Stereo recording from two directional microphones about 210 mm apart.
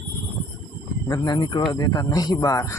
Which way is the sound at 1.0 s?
20° left (ahead or behind).